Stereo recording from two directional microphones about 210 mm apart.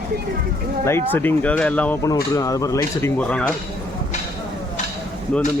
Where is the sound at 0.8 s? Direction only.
10° left (ahead or behind).